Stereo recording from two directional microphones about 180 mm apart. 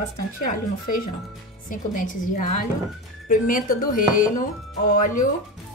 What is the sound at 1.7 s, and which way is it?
Speech, 45° left (ahead or behind).